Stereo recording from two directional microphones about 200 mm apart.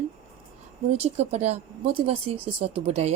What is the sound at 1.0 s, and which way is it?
Speech, 35° right (ahead or behind).